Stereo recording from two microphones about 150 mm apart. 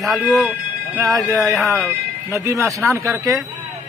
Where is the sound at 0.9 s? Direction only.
20° right (ahead or behind).